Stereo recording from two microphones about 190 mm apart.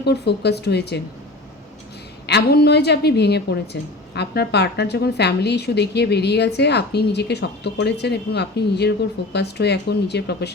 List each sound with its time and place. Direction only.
0.0 s a woman's voice: 60° left (ahead or behind)
2.2 s a woman's voice: 60° left (ahead or behind)